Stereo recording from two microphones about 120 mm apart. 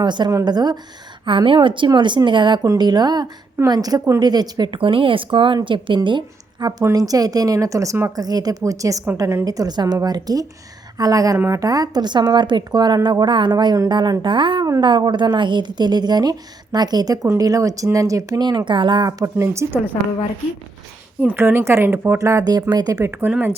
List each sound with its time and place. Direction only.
0.0 s a woman's voice: 40° right (ahead or behind)
19.2 s speech: 25° right (ahead or behind)
21.2 s a woman's voice: 15° right (ahead or behind); by 23.0 s 35° right (ahead or behind)
23.0 s speech: 20° right (ahead or behind)